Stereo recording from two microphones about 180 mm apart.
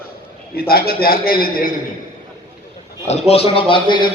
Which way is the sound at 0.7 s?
55° left (ahead or behind).